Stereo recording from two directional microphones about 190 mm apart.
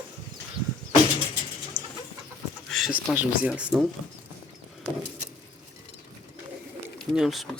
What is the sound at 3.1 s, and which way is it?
Speech, 5° right (ahead or behind).